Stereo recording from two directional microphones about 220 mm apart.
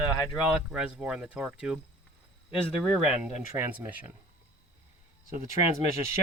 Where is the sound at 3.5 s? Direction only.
10° right (ahead or behind).